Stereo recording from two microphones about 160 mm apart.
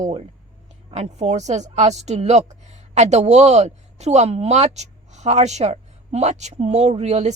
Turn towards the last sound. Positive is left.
turn(degrees=-40)  # may be behind; listen again after turning